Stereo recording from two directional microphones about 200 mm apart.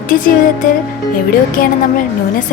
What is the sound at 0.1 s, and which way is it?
Music, 45° left (ahead or behind).